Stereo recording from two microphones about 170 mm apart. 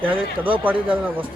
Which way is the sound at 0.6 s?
10° right (ahead or behind).